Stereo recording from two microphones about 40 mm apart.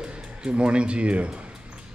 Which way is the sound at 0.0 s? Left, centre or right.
Right.